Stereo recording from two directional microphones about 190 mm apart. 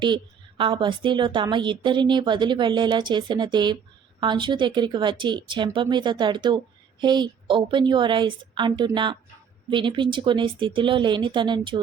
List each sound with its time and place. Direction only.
0.0 s a woman's voice: 25° right (ahead or behind)